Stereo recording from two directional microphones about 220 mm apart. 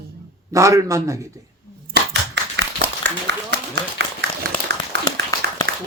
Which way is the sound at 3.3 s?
50° right (ahead or behind).